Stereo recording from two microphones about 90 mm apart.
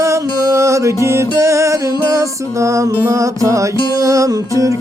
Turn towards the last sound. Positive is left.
turn(degrees=-35)  # may be behind; listen again after turning